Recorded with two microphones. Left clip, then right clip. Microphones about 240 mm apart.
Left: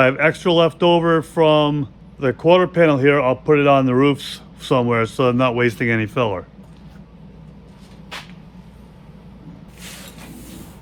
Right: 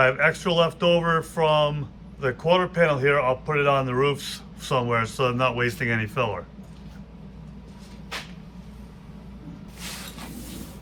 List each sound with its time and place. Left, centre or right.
0.0 s speech: left